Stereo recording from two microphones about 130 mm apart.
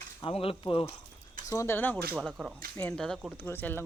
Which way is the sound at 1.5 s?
20° left (ahead or behind).